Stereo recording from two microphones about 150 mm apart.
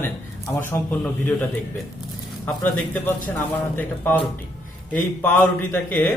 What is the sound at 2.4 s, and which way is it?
Speech, 10° left (ahead or behind).